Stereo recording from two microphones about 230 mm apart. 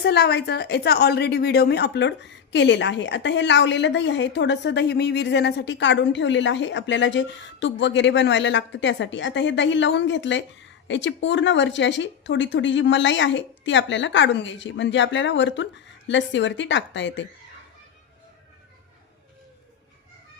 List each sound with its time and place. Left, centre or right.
0.0 s a woman's voice: left